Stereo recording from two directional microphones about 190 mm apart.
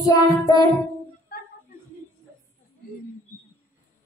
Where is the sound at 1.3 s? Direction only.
50° left (ahead or behind).